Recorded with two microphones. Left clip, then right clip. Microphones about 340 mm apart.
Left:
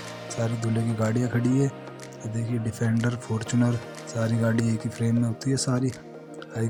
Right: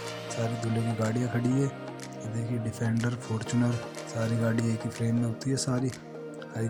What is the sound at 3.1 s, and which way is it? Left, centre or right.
Speech, right.